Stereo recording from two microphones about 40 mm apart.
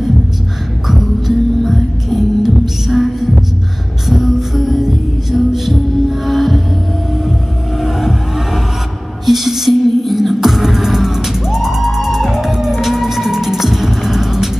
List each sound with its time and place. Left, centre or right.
0.8 s music: centre
4.1 s music: centre
9.2 s music: centre